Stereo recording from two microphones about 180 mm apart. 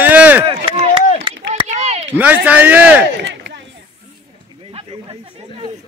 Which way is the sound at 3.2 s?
85° right.